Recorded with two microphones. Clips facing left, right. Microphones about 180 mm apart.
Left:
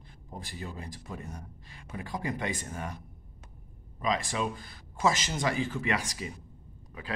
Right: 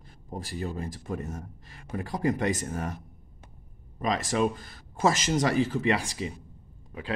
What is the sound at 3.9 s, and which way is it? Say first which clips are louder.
Speech: right 4 dB; 45° right (ahead or behind).